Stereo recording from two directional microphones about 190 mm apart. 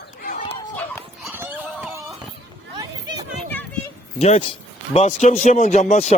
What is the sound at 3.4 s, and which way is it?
Children playing, 10° left (ahead or behind).